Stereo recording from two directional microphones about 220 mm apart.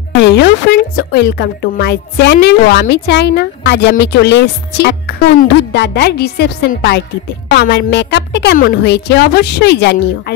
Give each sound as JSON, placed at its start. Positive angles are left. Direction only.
{"t": 0.1, "sound": "a woman's voice", "side_deg": 50}